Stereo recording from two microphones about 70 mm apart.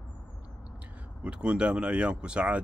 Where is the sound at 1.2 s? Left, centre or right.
Centre.